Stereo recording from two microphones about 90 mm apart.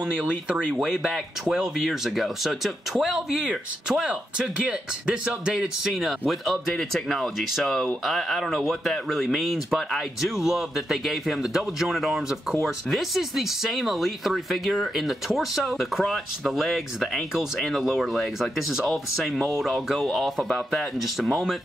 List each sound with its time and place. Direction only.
0.1 s speech: 10° right (ahead or behind)